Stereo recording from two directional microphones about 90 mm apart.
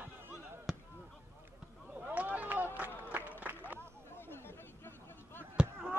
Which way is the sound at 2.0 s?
15° right (ahead or behind).